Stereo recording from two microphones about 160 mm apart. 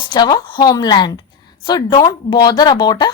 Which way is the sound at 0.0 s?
25° left (ahead or behind).